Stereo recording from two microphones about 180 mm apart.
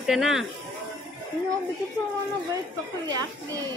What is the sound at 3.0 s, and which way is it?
Speech, 20° right (ahead or behind).